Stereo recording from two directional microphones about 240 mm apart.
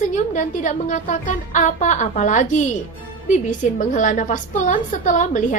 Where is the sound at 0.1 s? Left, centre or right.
Left.